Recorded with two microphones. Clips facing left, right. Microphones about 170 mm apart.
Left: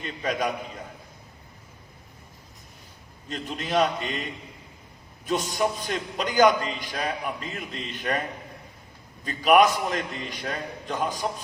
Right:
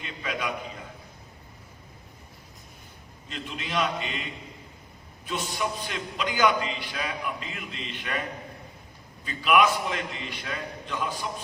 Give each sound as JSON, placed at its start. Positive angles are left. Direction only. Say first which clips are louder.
{"t": 0.0, "sound": "a man's voice", "louder": "left 5 dB", "side_deg": 40}
{"t": 3.2, "sound": "a man's voice", "louder": "left 4 dB", "side_deg": 40}
{"t": 9.2, "sound": "a man's voice", "louder": "left 4 dB", "side_deg": 40}